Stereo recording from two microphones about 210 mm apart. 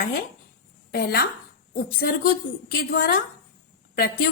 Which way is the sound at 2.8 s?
50° left (ahead or behind).